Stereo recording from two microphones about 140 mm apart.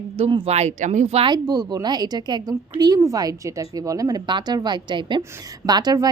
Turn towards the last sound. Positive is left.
turn(degrees=-30)  # may be behind; listen again after turning